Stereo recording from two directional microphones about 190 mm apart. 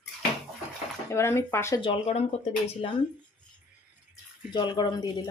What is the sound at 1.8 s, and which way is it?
Speech, 30° left (ahead or behind).